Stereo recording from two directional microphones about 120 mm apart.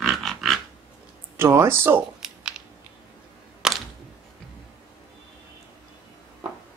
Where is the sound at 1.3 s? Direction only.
20° right (ahead or behind).